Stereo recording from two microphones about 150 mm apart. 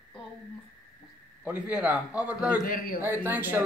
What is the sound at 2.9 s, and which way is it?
Speech, 15° right (ahead or behind).